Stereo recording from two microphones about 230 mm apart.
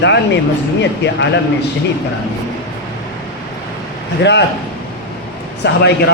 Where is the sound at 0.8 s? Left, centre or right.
Left.